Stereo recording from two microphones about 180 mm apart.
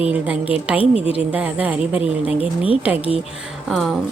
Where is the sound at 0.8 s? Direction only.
35° left (ahead or behind).